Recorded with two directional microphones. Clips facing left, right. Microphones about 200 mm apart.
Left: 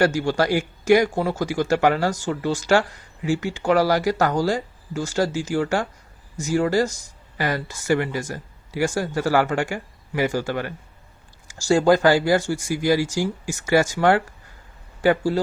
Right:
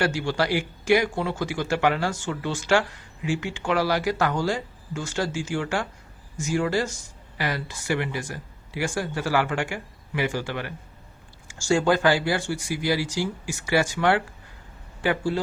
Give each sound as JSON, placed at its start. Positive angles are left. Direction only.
{"t": 0.0, "sound": "speech", "side_deg": 40}